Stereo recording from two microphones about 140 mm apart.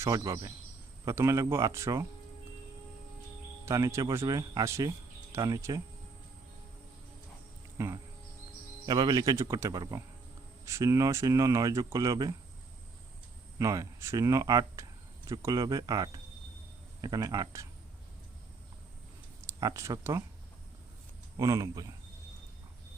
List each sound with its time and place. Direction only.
0.0 s speech: 25° right (ahead or behind)
3.7 s speech: 20° right (ahead or behind)
7.8 s speech: 20° right (ahead or behind)
13.6 s speech: 20° right (ahead or behind)
19.5 s speech: 25° right (ahead or behind)
21.3 s speech: 25° right (ahead or behind)